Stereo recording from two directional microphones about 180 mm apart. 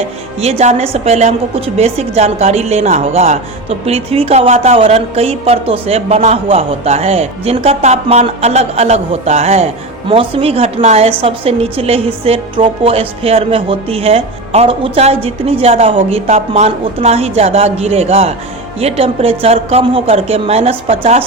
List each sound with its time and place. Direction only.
0.3 s a woman's voice: 35° right (ahead or behind)